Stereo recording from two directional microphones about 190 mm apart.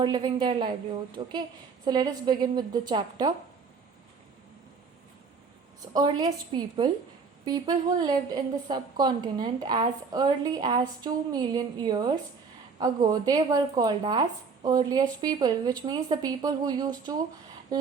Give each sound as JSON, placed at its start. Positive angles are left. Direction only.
{"t": 0.0, "sound": "speech", "side_deg": -25}
{"t": 1.8, "sound": "speech", "side_deg": -20}
{"t": 5.9, "sound": "speech", "side_deg": -20}